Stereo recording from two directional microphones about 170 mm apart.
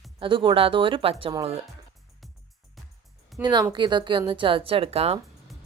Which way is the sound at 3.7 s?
25° right (ahead or behind).